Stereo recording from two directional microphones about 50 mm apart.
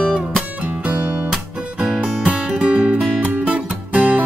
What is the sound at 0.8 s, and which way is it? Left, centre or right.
Music, right.